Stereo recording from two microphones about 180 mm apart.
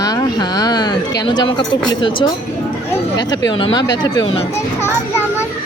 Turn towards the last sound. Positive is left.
turn(degrees=25)  # may be behind; listen again after turning